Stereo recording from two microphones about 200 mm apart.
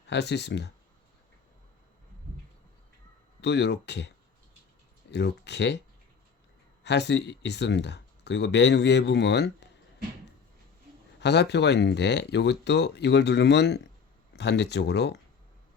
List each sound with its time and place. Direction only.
0.1 s speech: 60° left (ahead or behind)
3.4 s speech: 60° left (ahead or behind)
5.1 s speech: 60° left (ahead or behind)
6.8 s speech: 60° left (ahead or behind)
11.2 s speech: 60° left (ahead or behind)